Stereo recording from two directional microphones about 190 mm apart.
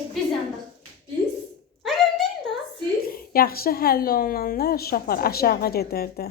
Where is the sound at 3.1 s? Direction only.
50° left (ahead or behind).